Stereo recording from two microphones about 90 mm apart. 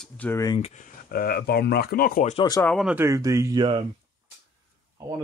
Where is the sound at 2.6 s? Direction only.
30° left (ahead or behind).